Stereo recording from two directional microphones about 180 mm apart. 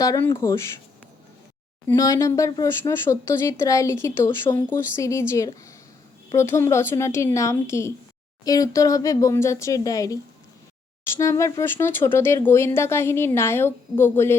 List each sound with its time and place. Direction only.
0.0 s speech: 20° left (ahead or behind)
1.9 s speech: 15° left (ahead or behind)
11.2 s speech: 15° left (ahead or behind)